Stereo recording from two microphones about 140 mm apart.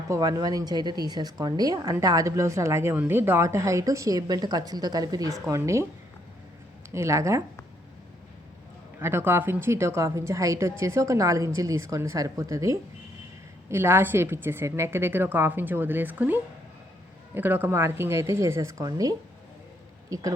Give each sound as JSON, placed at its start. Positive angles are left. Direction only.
{"t": 0.1, "sound": "speech", "side_deg": -30}
{"t": 6.9, "sound": "speech", "side_deg": -20}
{"t": 9.0, "sound": "a woman's voice", "side_deg": -15}